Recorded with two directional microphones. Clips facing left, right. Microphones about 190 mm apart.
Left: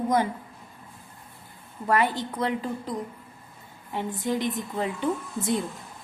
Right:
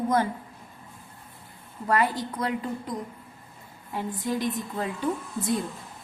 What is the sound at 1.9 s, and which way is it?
Speech, 25° left (ahead or behind).